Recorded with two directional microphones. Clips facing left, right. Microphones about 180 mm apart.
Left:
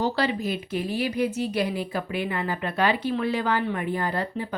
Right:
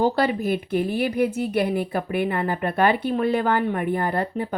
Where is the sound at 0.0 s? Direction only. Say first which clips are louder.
Right 4 dB; 50° right (ahead or behind).